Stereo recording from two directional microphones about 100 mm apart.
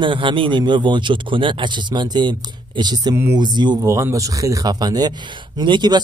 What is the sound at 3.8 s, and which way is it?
Speech, 30° right (ahead or behind).